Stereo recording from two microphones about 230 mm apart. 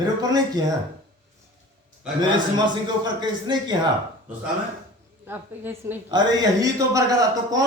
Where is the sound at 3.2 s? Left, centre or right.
Centre.